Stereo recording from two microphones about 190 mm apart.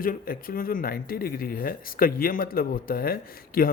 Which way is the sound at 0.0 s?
50° left (ahead or behind).